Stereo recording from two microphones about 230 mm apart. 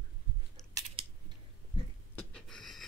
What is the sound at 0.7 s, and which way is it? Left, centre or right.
Scissors, right.